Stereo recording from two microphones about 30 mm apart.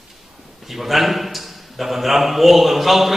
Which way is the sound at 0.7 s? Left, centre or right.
Centre.